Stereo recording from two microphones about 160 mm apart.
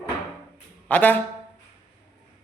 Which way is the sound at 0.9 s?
10° left (ahead or behind).